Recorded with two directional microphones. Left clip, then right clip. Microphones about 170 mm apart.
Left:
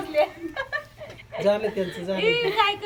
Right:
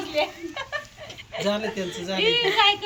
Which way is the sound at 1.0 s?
20° left (ahead or behind).